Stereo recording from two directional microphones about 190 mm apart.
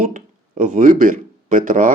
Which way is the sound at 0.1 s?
40° right (ahead or behind).